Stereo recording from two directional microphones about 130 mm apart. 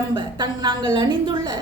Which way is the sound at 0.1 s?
35° right (ahead or behind).